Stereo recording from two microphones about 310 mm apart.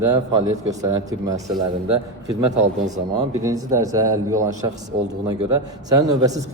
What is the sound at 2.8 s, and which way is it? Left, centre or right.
Speech, right.